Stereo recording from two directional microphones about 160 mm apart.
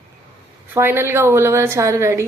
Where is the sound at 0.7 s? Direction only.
15° right (ahead or behind).